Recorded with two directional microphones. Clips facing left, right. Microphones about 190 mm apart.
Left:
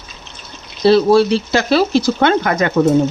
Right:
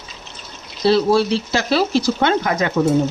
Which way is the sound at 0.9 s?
65° left (ahead or behind).